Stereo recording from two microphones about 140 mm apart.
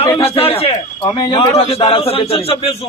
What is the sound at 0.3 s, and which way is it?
Speech, 45° left (ahead or behind).